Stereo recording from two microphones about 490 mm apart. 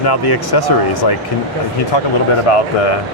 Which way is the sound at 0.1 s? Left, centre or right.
Left.